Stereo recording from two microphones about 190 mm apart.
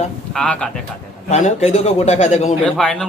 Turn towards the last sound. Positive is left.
turn(degrees=0)  # may be behind; listen again after turning